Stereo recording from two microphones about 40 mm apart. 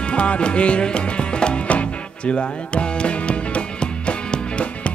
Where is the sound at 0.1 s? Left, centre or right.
Left.